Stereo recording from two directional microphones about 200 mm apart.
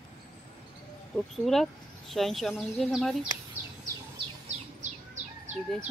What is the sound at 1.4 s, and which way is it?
Speech, centre (ahead or behind).